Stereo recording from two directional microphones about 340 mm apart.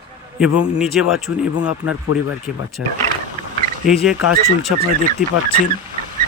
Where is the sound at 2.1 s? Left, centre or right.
Left.